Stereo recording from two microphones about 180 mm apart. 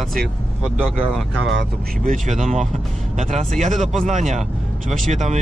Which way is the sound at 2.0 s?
45° right (ahead or behind).